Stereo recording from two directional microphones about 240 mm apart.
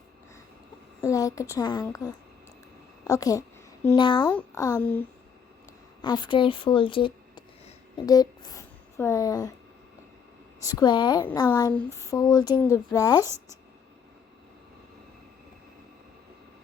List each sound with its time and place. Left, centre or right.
1.0 s a woman's voice: centre
6.0 s a woman's voice: centre
10.6 s speech: centre
13.2 s speech: centre